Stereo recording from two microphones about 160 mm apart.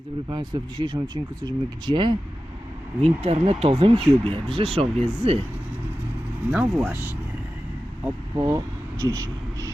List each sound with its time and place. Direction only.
0.3 s speech: 25° right (ahead or behind)
3.0 s speech: 40° right (ahead or behind)
6.5 s speech: 5° right (ahead or behind)
8.4 s speech: 20° right (ahead or behind)